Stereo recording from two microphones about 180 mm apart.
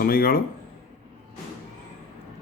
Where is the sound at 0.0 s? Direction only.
55° left (ahead or behind).